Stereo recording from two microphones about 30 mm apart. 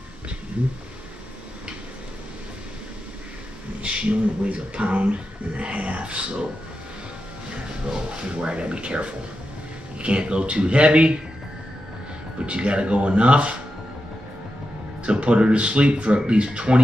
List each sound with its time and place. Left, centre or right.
3.8 s speech: right
7.9 s speech: right
12.4 s speech: right
15.0 s speech: right